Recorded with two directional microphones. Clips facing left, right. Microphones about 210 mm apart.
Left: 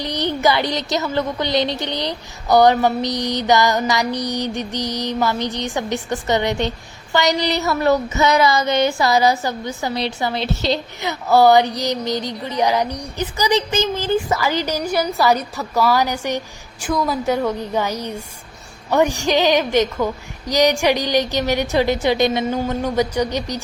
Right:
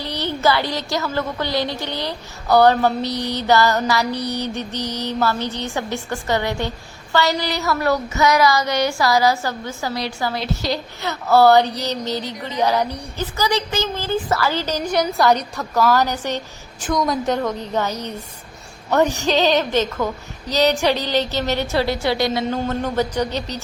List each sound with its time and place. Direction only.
0.0 s speech: 15° left (ahead or behind)